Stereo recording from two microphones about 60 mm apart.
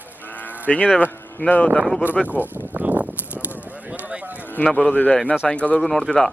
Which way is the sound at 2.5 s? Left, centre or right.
Right.